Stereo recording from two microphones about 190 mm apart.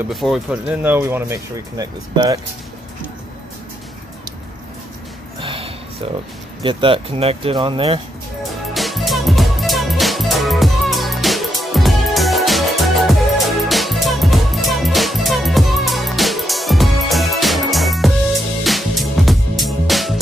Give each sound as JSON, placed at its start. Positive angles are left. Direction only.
{"t": 0.1, "sound": "speech", "side_deg": 0}
{"t": 5.4, "sound": "a sound", "side_deg": -30}
{"t": 6.6, "sound": "speech", "side_deg": -25}
{"t": 8.5, "sound": "music", "side_deg": 0}